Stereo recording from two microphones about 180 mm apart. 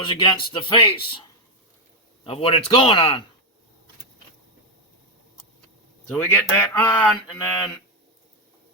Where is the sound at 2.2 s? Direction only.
30° left (ahead or behind).